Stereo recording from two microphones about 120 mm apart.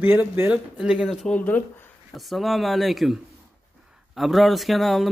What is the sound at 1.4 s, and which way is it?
Speech, 15° left (ahead or behind).